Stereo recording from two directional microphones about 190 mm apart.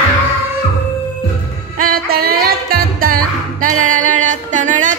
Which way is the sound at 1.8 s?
50° right (ahead or behind).